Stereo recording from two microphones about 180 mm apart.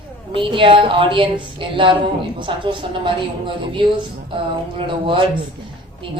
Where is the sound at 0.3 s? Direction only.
30° right (ahead or behind).